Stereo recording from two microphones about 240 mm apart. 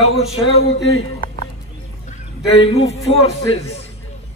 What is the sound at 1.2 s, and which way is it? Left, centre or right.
Music, left.